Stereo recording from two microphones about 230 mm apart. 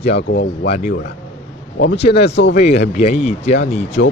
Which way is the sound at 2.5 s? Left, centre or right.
Left.